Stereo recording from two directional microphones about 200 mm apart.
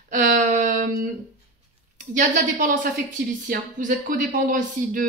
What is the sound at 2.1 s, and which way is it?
Speech, 40° right (ahead or behind).